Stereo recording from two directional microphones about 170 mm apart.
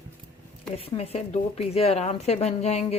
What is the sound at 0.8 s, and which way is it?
A woman's voice, 35° left (ahead or behind).